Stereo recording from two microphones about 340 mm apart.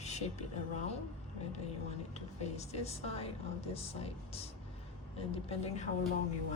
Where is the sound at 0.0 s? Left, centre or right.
Centre.